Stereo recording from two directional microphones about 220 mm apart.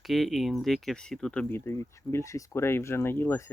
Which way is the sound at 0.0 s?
Centre (ahead or behind).